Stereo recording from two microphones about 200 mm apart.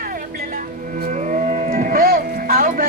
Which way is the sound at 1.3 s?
40° right (ahead or behind).